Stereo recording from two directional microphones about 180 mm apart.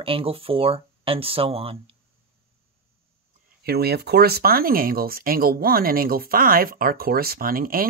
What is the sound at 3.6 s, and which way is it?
Speech, 60° right (ahead or behind).